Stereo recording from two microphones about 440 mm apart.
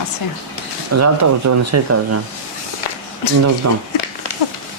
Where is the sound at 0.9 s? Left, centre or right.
Right.